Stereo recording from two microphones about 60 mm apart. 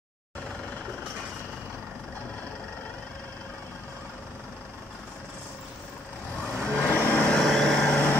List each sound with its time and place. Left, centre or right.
6.6 s vehicle: centre